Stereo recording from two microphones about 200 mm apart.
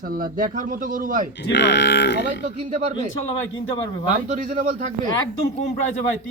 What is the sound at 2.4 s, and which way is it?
Speech, 40° right (ahead or behind).